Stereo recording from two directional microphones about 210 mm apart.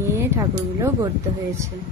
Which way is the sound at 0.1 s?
15° right (ahead or behind).